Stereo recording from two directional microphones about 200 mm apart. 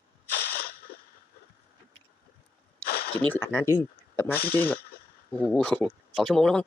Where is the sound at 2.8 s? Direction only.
50° left (ahead or behind).